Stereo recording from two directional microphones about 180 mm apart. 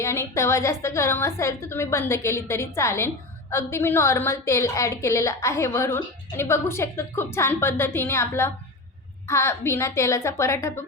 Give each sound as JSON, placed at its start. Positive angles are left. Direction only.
{"t": 0.0, "sound": "a woman's voice", "side_deg": 15}